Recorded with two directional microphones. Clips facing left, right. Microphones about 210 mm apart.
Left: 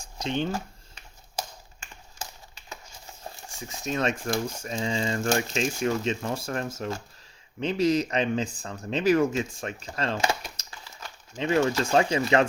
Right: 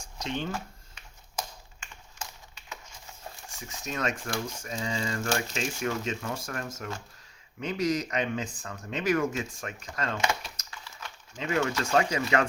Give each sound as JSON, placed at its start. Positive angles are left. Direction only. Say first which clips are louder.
{"t": 0.2, "sound": "speech", "louder": "left 5 dB", "side_deg": 30}
{"t": 3.5, "sound": "speech", "louder": "left 6 dB", "side_deg": 30}